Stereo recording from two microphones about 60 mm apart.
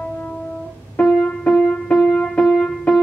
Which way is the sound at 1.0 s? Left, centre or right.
Centre.